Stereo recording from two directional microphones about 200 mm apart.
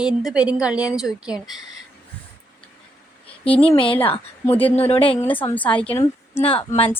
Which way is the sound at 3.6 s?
25° left (ahead or behind).